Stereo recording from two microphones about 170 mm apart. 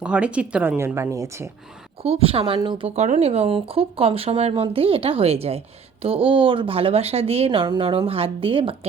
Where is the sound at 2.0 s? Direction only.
35° right (ahead or behind).